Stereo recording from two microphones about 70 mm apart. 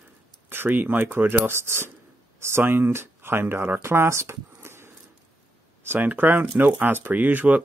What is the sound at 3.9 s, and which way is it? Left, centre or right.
Speech, right.